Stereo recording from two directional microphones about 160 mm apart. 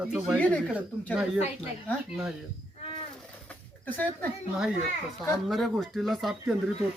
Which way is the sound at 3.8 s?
10° left (ahead or behind).